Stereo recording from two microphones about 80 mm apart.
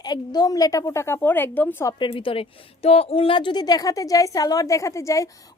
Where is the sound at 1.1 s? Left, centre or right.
Left.